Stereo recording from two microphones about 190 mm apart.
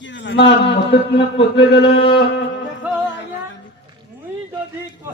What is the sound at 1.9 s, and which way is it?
Speech, 30° left (ahead or behind).